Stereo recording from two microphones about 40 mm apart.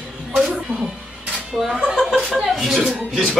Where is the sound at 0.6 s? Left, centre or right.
Right.